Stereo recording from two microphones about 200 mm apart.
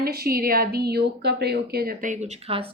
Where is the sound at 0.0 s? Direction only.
50° right (ahead or behind).